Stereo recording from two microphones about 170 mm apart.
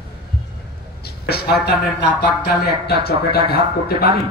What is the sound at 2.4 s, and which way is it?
A man's voice, 65° left (ahead or behind).